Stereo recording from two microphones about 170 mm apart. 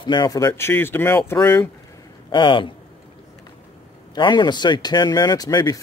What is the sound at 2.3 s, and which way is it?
Speech, 30° left (ahead or behind).